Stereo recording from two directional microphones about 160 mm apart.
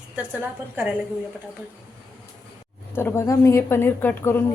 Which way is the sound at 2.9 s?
15° left (ahead or behind).